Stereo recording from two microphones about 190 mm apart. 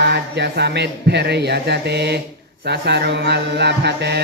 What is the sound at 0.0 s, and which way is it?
Mantra, 60° right (ahead or behind).